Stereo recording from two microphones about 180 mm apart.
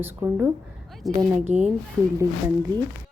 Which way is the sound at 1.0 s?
Centre (ahead or behind).